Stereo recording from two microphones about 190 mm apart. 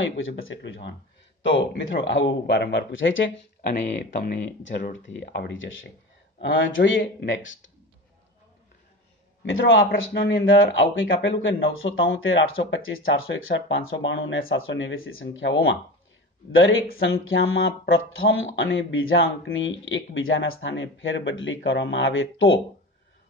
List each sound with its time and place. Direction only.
0.0 s speech: 90° left
3.3 s speech: 50° left (ahead or behind)
4.4 s speech: 70° left (ahead or behind); by 7.0 s 90° left
7.0 s speech: 65° left (ahead or behind)
9.4 s speech: 85° left
21.6 s speech: 75° left (ahead or behind); by 22.6 s 90° left